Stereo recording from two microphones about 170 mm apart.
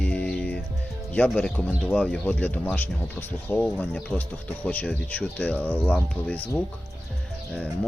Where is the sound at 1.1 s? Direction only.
5° left (ahead or behind).